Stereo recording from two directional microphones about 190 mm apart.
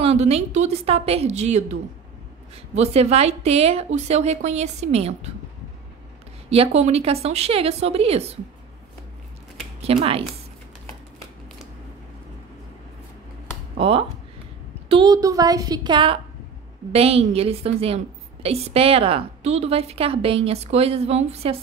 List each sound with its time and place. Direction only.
0.0 s a woman's voice: 35° right (ahead or behind)
6.5 s a woman's voice: 30° right (ahead or behind)
9.8 s a woman's voice: 30° right (ahead or behind)
13.7 s a woman's voice: 30° right (ahead or behind)